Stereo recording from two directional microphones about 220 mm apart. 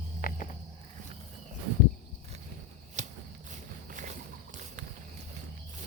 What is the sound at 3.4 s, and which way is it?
Walk, 35° right (ahead or behind).